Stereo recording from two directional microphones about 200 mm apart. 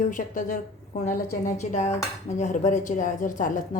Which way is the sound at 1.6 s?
35° left (ahead or behind).